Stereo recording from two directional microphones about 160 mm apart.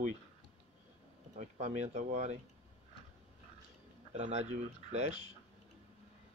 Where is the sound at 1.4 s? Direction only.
45° right (ahead or behind).